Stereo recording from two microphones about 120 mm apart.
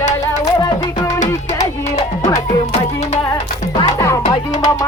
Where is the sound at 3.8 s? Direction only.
30° left (ahead or behind).